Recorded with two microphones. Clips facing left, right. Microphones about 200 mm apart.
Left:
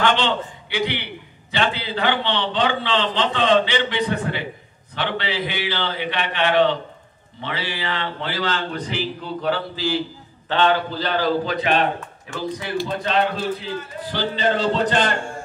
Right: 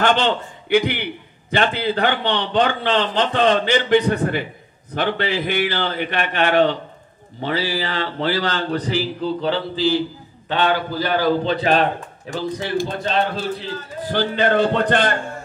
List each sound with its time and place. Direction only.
0.0 s a man's voice: 50° right (ahead or behind)
10.5 s a man's voice: 10° right (ahead or behind)
11.4 s a man's voice: 35° right (ahead or behind)
12.7 s a man's voice: 45° right (ahead or behind)
14.1 s speech: 55° right (ahead or behind)